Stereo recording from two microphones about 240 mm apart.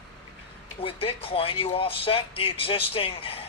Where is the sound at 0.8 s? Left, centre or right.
Left.